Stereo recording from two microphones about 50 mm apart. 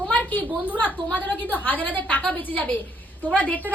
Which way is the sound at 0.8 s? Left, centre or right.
Left.